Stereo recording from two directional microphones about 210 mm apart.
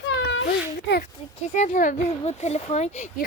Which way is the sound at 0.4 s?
45° left (ahead or behind).